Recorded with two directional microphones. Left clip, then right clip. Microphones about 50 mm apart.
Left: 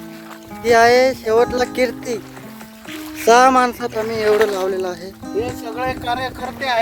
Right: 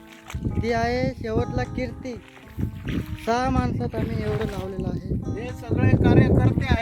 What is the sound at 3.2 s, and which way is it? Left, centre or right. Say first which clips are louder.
Speech: left 13 dB; left.